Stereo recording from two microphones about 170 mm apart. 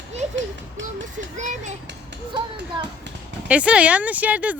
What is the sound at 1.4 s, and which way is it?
Speech, 45° right (ahead or behind).